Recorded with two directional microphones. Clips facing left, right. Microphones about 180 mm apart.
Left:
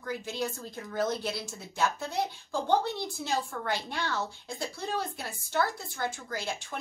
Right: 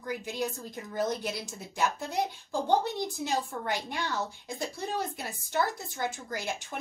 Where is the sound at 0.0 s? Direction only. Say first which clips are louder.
Even; 15° right (ahead or behind).